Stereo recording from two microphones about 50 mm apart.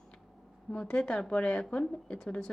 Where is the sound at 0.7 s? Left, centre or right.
Centre.